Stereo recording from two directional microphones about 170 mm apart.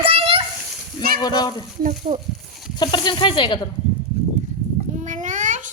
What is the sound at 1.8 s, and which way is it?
Speech, 45° right (ahead or behind).